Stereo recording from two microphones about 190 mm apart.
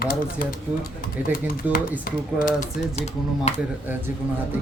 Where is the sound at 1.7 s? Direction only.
45° left (ahead or behind).